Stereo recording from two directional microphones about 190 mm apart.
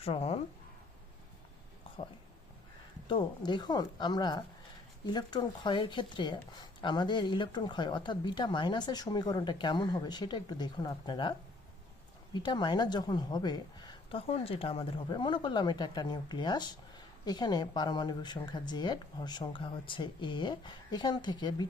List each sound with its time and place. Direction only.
0.0 s speech: 30° left (ahead or behind)
3.1 s speech: 25° left (ahead or behind)